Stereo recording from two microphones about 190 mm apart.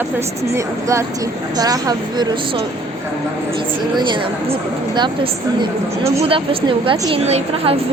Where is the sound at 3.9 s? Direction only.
25° right (ahead or behind).